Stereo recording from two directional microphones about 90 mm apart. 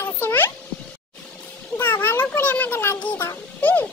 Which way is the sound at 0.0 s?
25° left (ahead or behind).